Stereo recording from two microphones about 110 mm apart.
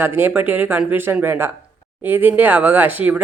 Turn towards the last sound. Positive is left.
turn(degrees=-15)  # may be behind; listen again after turning